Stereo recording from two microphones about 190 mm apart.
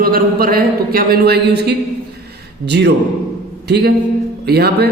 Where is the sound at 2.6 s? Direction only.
65° right (ahead or behind).